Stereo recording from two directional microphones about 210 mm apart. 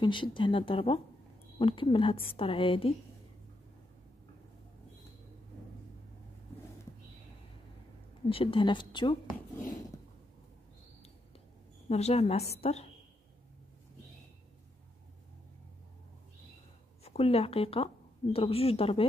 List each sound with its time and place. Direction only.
0.0 s speech: 25° left (ahead or behind)
8.3 s speech: 25° left (ahead or behind)
11.9 s speech: 30° left (ahead or behind)
17.0 s speech: 30° left (ahead or behind)